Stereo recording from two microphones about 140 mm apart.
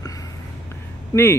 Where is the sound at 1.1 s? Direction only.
25° left (ahead or behind).